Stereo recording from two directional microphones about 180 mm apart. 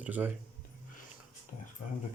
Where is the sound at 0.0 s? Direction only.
10° right (ahead or behind).